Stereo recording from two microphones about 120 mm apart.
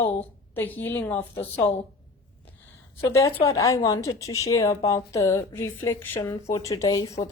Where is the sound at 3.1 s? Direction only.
25° left (ahead or behind).